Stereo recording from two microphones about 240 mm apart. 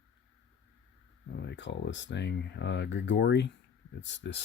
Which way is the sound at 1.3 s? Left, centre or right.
Left.